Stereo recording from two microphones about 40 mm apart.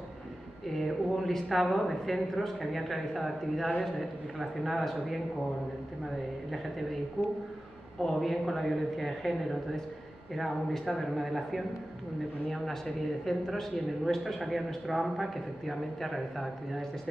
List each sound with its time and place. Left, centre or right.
0.8 s speech: centre
6.5 s speech: centre
7.2 s a man's voice: left
8.1 s speech: centre